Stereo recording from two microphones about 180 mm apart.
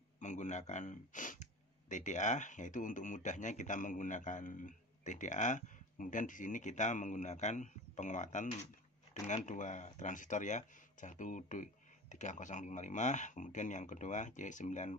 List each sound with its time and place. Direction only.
0.2 s speech: 45° left (ahead or behind)